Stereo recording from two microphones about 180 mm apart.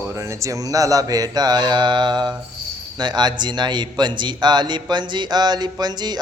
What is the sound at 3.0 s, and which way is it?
A man's voice, 25° right (ahead or behind).